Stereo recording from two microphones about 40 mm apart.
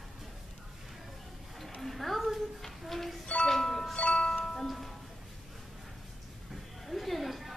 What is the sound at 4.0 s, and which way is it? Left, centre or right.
Music, left.